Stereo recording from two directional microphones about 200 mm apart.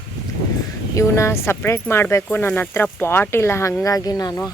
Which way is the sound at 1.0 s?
15° left (ahead or behind).